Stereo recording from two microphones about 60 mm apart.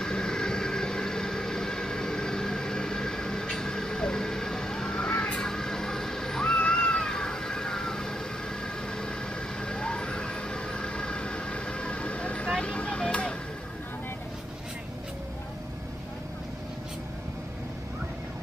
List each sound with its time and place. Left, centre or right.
0.0 s vehicle: centre
9.6 s vehicle: centre